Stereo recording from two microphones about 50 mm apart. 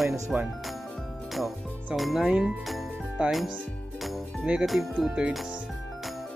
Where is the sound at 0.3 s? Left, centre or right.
Right.